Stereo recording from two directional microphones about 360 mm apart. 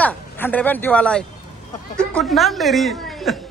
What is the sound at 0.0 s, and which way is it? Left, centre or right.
A woman's voice, centre.